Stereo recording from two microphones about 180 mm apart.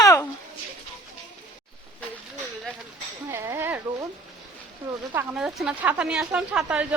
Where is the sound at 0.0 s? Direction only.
15° left (ahead or behind).